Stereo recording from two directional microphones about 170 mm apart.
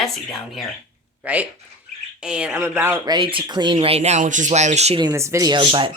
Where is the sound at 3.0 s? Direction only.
30° right (ahead or behind).